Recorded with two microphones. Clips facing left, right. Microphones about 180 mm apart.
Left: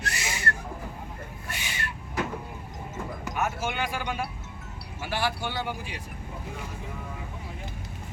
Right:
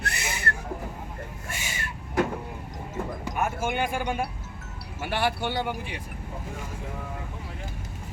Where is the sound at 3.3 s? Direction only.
50° right (ahead or behind).